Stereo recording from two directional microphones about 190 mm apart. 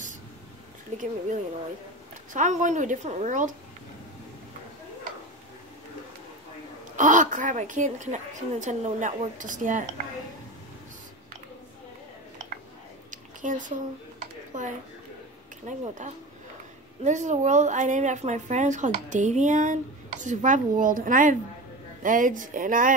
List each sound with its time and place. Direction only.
2.3 s a woman's voice: 40° right (ahead or behind)
7.0 s a woman's voice: 40° right (ahead or behind)
13.1 s a sound: 40° right (ahead or behind)
14.5 s a woman's voice: 40° right (ahead or behind)
17.0 s a woman's voice: 40° right (ahead or behind)